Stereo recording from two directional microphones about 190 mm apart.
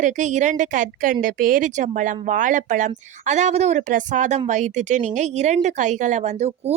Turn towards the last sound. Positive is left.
turn(degrees=-35)  # may be behind; listen again after turning